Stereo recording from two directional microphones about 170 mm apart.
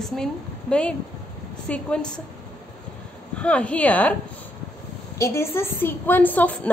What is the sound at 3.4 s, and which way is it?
Speech, 5° left (ahead or behind).